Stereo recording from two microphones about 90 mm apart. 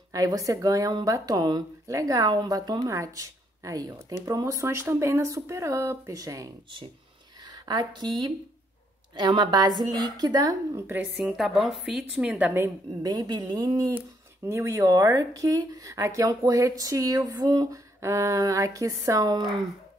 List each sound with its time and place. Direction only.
0.1 s a woman's voice: 40° right (ahead or behind)
7.3 s speech: 50° right (ahead or behind)
9.4 s a woman's voice: 55° right (ahead or behind)
10.7 s speech: 25° right (ahead or behind)
11.1 s a woman's voice: centre (ahead or behind); by 12.6 s 15° right (ahead or behind)
13.0 s a woman's voice: 45° right (ahead or behind)
13.9 s speech: 30° right (ahead or behind)